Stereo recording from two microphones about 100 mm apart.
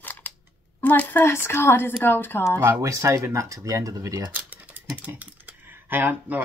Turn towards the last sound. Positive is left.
turn(degrees=-20)  # may be behind; listen again after turning